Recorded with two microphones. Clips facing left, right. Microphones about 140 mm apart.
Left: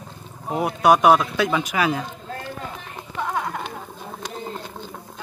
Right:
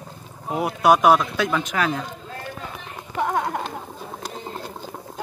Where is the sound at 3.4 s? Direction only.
30° right (ahead or behind).